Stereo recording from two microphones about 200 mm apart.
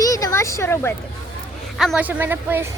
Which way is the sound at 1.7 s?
5° right (ahead or behind).